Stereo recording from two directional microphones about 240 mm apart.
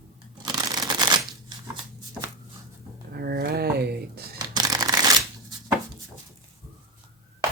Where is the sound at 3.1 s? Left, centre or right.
Right.